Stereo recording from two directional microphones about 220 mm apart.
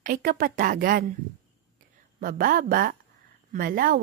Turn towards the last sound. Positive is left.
turn(degrees=-40)  # may be behind; listen again after turning